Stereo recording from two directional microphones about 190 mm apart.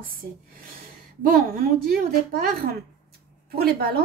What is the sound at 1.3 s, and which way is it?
Speech, 50° right (ahead or behind).